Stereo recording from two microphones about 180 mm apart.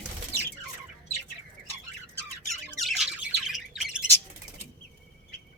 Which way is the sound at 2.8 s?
Centre (ahead or behind).